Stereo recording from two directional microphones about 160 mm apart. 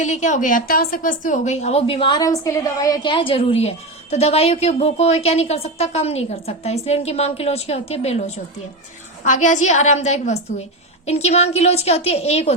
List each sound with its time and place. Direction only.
0.0 s a woman's voice: 50° left (ahead or behind)
9.2 s a woman's voice: 50° left (ahead or behind)